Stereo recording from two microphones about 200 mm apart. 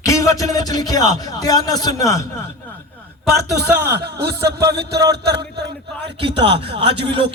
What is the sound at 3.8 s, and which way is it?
A man's voice, 55° right (ahead or behind).